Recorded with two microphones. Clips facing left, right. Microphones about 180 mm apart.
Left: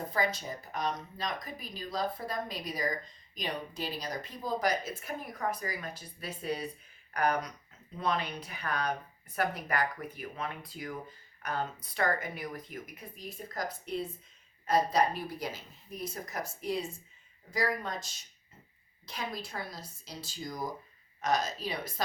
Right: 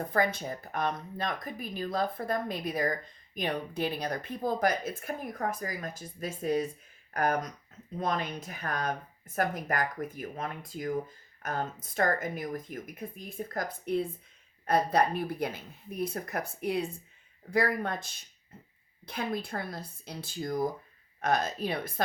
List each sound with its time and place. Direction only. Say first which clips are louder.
0.1 s speech: right 4 dB; 55° right (ahead or behind)